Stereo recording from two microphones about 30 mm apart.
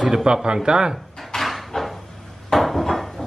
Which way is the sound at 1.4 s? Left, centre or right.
Centre.